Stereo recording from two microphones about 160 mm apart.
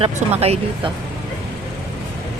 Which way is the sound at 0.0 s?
40° right (ahead or behind).